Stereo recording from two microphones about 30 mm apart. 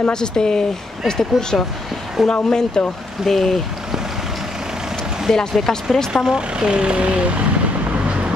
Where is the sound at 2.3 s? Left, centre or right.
Left.